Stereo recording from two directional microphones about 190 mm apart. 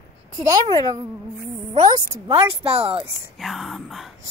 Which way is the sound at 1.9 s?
20° right (ahead or behind).